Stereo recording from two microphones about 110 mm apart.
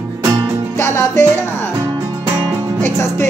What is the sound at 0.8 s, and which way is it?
Music, 25° left (ahead or behind).